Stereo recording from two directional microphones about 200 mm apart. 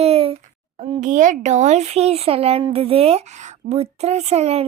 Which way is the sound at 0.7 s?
35° right (ahead or behind).